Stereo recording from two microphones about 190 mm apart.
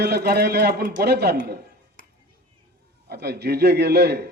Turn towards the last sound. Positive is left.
turn(degrees=-60)  # may be behind; listen again after turning